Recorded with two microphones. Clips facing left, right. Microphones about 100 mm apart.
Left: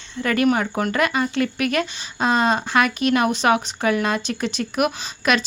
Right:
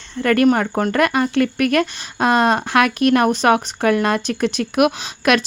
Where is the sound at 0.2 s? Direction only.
50° right (ahead or behind).